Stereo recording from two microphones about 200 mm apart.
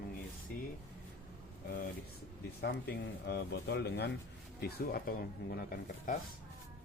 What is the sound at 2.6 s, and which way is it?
Speech, 55° left (ahead or behind).